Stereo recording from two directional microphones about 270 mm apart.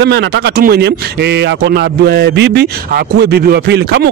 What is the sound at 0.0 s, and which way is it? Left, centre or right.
Speech, right.